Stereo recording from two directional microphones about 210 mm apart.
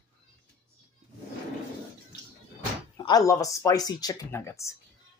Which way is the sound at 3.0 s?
15° left (ahead or behind).